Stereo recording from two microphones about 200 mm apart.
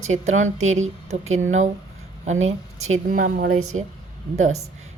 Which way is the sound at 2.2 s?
35° right (ahead or behind).